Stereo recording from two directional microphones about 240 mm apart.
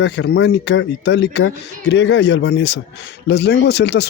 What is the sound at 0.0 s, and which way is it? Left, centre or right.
Speech, left.